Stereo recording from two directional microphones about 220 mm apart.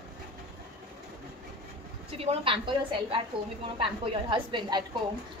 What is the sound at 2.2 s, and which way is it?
A woman's voice, 25° right (ahead or behind).